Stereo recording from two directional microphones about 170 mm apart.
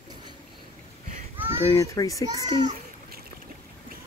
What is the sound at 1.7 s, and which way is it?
Speech, 20° left (ahead or behind).